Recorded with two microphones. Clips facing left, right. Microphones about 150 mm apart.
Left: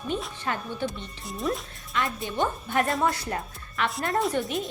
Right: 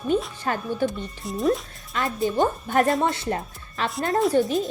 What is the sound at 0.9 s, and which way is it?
Speech, centre (ahead or behind).